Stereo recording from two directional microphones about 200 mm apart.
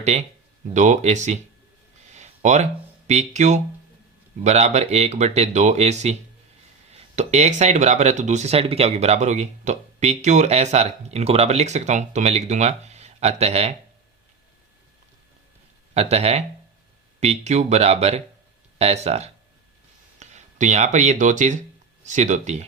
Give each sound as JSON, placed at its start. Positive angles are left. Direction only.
{"t": 0.0, "sound": "speech", "side_deg": -35}
{"t": 2.1, "sound": "a sound", "side_deg": -35}
{"t": 3.1, "sound": "speech", "side_deg": -35}
{"t": 16.0, "sound": "speech", "side_deg": -30}